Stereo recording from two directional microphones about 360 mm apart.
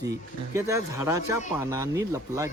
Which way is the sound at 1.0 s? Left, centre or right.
Left.